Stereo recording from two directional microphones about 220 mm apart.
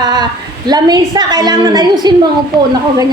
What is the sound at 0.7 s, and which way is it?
A woman's voice, 20° right (ahead or behind).